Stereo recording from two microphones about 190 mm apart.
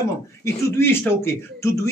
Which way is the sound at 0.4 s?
15° left (ahead or behind).